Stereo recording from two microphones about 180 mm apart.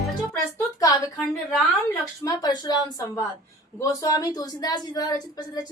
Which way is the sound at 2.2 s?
20° left (ahead or behind).